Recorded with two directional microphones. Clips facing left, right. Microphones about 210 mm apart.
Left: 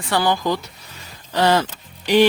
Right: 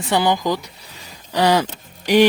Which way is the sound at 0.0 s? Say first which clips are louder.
Right 1 dB; 20° right (ahead or behind).